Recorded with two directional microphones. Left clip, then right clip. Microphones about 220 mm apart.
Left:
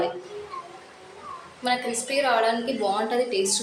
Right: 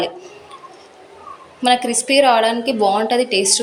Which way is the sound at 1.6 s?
35° right (ahead or behind).